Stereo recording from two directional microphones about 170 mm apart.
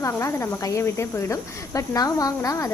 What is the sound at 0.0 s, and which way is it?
Speech, 15° left (ahead or behind).